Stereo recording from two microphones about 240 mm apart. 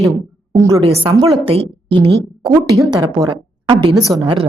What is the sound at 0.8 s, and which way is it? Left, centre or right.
A woman's voice, right.